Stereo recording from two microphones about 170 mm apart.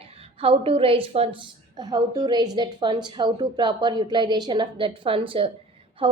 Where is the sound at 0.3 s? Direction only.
35° right (ahead or behind).